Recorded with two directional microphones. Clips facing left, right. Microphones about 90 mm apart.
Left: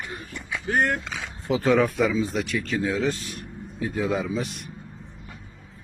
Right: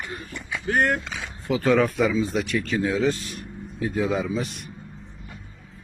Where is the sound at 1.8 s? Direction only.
Centre (ahead or behind).